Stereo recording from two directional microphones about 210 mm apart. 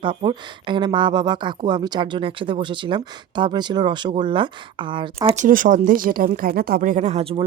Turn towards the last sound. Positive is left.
turn(degrees=-35)  # may be behind; listen again after turning